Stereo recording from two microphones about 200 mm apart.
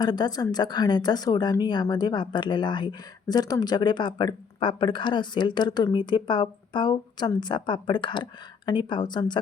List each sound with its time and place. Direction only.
0.0 s speech: 20° left (ahead or behind)